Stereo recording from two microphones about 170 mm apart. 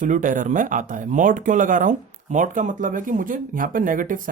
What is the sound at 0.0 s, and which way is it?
Speech, 50° right (ahead or behind).